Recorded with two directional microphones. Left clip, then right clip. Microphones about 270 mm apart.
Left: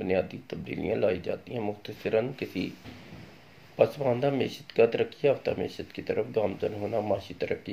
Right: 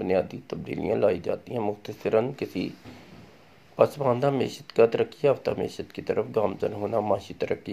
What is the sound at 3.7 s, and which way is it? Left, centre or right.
Speech, right.